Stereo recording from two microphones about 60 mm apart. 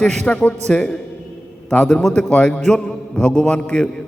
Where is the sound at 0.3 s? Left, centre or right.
Left.